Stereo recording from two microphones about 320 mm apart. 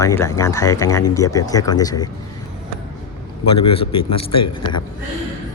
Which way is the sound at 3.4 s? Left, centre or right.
Left.